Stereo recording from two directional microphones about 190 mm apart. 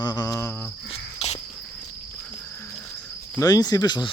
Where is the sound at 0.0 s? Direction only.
20° left (ahead or behind).